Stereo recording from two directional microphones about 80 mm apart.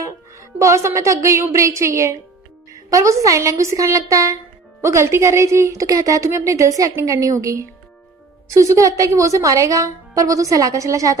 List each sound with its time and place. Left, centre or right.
0.0 s a woman's voice: right